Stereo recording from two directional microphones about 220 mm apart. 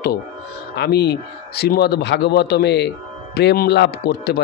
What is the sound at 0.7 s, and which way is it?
Speech, 50° left (ahead or behind).